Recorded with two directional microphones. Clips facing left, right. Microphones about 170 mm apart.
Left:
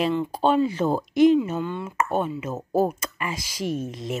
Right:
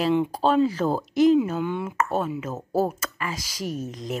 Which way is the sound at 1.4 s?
10° right (ahead or behind).